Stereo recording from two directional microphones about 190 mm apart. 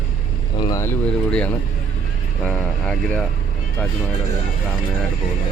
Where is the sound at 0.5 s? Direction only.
20° left (ahead or behind); by 3.3 s 5° left (ahead or behind).